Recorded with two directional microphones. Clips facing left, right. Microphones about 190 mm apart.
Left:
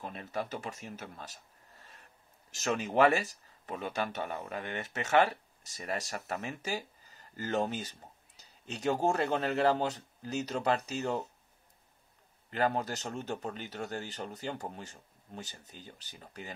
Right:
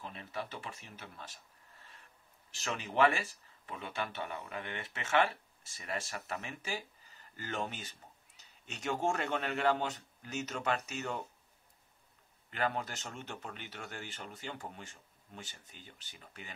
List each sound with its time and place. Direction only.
0.0 s a man's voice: 40° left (ahead or behind)
12.4 s speech: 40° left (ahead or behind)